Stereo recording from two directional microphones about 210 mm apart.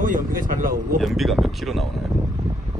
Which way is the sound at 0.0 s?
40° right (ahead or behind).